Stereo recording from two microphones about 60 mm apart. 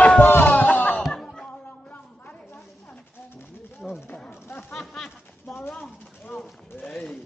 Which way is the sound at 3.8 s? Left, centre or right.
Centre.